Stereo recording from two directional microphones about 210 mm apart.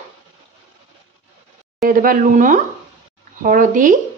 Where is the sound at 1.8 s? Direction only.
40° right (ahead or behind).